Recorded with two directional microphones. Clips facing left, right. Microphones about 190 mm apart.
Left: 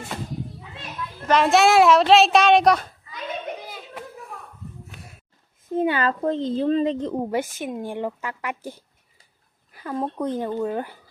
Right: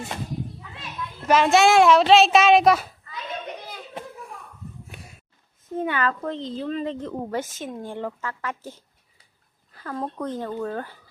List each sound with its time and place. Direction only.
1.3 s a child's voice: centre (ahead or behind)
5.7 s a child's voice: 30° left (ahead or behind)
6.6 s a child's voice: 30° left (ahead or behind)
6.8 s speech: 20° left (ahead or behind)